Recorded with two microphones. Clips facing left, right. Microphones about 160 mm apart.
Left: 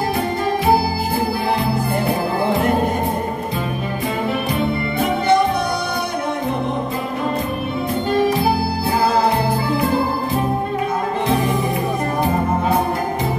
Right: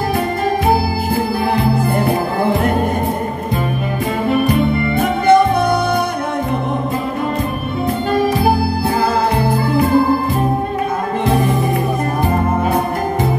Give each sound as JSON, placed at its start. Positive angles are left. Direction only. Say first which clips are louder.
{"t": 4.9, "sound": "music", "louder": "right 5 dB", "side_deg": -50}